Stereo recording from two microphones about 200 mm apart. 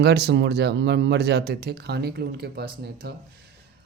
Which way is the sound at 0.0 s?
55° right (ahead or behind).